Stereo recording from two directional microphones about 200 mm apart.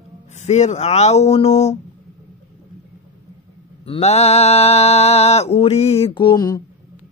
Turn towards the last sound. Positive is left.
turn(degrees=20)  # may be behind; listen again after turning